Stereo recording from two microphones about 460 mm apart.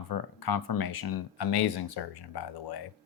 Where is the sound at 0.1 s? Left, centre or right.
Left.